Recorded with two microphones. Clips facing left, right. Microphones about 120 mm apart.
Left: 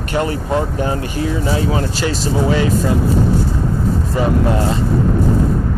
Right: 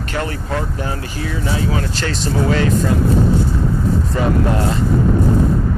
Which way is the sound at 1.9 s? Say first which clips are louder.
Left 2 dB; 10° left (ahead or behind).